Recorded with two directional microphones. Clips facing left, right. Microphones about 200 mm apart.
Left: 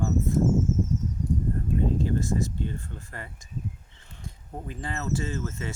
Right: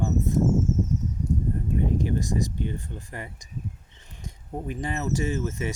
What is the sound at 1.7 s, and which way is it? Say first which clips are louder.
Speech: even; 15° right (ahead or behind).